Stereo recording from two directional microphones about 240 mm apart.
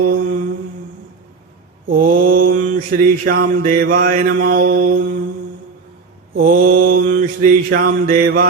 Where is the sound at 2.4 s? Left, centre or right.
Right.